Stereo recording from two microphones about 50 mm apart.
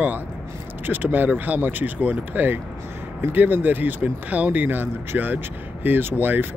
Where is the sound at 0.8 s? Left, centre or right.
Right.